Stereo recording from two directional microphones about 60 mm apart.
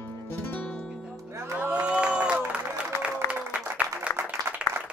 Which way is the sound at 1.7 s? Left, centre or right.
Centre.